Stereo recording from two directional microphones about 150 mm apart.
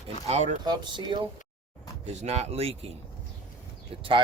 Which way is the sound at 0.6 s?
30° right (ahead or behind).